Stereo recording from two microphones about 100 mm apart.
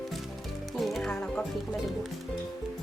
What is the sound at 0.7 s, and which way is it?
Music, centre (ahead or behind).